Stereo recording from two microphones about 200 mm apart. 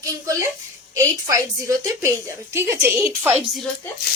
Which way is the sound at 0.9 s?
15° right (ahead or behind).